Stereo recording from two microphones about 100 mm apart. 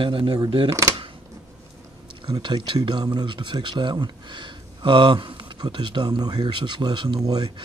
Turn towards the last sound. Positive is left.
turn(degrees=-45)  # may be behind; listen again after turning